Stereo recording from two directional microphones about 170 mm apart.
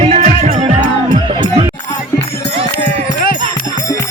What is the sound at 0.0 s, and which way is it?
Music, 40° right (ahead or behind).